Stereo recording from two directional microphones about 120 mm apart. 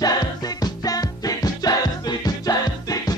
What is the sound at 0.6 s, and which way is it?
Music, 30° left (ahead or behind).